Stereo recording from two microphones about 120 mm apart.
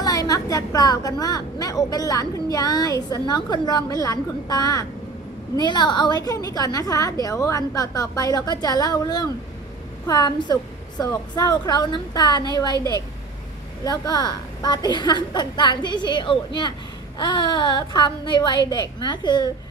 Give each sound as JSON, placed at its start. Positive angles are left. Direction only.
{"t": 0.0, "sound": "a woman's voice", "side_deg": 30}
{"t": 13.8, "sound": "a woman's voice", "side_deg": 35}